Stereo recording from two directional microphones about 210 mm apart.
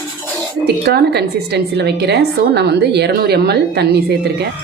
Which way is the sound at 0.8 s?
50° right (ahead or behind).